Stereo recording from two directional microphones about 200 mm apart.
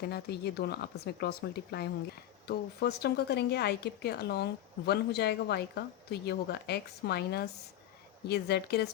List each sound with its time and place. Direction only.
0.0 s a woman's voice: 55° left (ahead or behind)